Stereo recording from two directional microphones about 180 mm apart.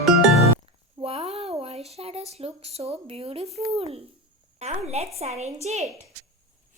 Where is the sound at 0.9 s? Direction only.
30° right (ahead or behind).